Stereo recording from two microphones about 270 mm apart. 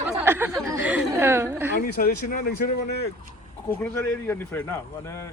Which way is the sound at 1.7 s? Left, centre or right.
Left.